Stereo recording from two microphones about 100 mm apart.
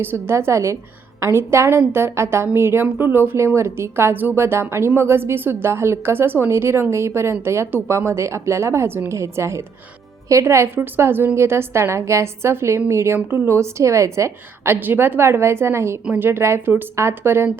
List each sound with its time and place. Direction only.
0.0 s a woman's voice: 25° right (ahead or behind)